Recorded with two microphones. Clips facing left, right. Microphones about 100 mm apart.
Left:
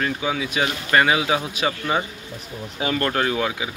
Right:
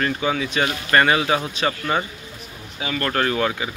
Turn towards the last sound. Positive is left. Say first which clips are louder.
# right 1 dB
turn(degrees=10)  # may be behind; listen again after turning